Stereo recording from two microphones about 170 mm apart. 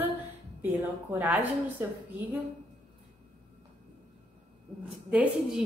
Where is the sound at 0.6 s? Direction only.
10° right (ahead or behind).